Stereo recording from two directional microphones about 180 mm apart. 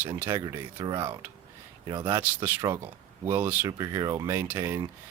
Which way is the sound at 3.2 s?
10° right (ahead or behind).